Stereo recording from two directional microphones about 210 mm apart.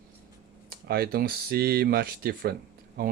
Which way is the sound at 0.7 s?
50° right (ahead or behind).